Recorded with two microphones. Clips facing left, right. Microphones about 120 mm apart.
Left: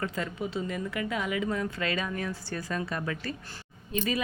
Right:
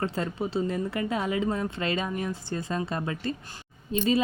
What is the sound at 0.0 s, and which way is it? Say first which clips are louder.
Speech: right 3 dB; 30° right (ahead or behind).